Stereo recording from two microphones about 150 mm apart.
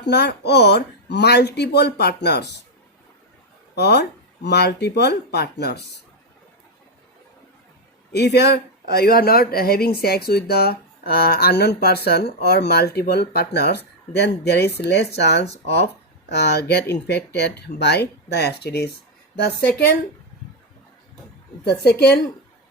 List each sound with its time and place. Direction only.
0.1 s speech: 90° left
3.8 s speech: 90° left
8.1 s speech: 90° left
21.6 s speech: 90° left